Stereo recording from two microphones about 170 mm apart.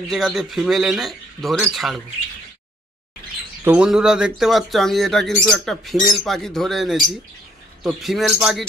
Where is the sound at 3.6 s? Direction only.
5° right (ahead or behind).